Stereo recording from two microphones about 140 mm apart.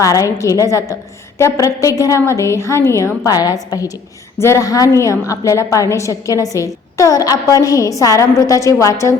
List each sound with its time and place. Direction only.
0.0 s a woman's voice: 25° left (ahead or behind)